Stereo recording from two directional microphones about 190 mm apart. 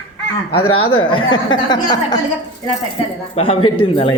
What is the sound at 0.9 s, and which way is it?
A woman's voice, 25° left (ahead or behind).